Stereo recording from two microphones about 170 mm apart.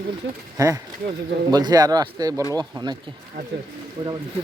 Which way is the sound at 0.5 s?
15° right (ahead or behind).